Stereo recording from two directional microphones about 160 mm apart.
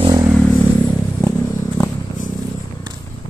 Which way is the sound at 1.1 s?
15° left (ahead or behind).